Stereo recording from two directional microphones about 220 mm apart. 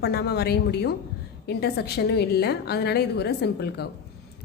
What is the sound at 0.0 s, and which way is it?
A woman's voice, 45° left (ahead or behind).